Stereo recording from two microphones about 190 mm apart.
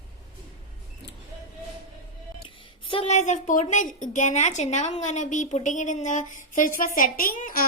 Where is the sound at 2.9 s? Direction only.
30° left (ahead or behind).